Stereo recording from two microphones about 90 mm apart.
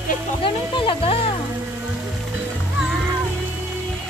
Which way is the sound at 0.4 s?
85° left.